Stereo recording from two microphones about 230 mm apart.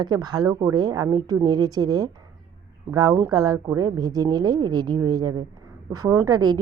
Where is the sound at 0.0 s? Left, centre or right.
Centre.